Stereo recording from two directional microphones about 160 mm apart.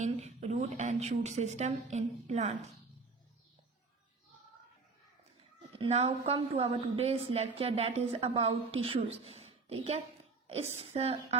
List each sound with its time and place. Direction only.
0.0 s a woman's voice: 45° right (ahead or behind)
5.8 s speech: 35° right (ahead or behind)